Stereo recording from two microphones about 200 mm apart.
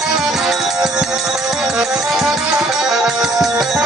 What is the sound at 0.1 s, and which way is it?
Music, centre (ahead or behind).